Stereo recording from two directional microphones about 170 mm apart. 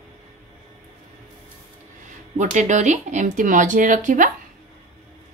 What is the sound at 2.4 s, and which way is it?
A woman's voice, 45° right (ahead or behind).